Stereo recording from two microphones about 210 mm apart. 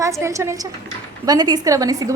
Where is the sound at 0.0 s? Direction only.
15° right (ahead or behind).